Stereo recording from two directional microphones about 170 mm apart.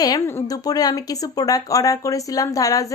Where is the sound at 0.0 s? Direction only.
20° left (ahead or behind).